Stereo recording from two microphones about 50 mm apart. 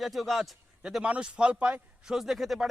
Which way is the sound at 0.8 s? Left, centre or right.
Centre.